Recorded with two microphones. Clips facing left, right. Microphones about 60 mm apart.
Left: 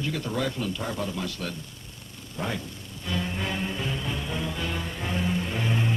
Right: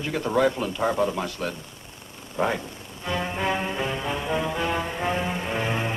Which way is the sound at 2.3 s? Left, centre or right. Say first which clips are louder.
Right 7 dB; right.